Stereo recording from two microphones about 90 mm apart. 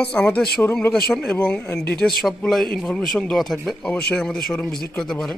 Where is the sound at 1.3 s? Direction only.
20° left (ahead or behind).